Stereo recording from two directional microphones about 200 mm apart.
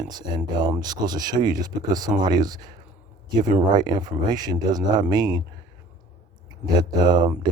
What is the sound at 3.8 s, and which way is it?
Speech, 20° right (ahead or behind).